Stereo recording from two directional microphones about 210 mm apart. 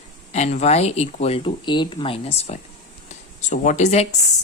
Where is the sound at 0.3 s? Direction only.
35° left (ahead or behind).